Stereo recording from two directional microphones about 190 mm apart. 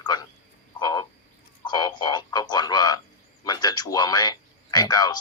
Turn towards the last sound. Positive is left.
turn(degrees=20)  # may be behind; listen again after turning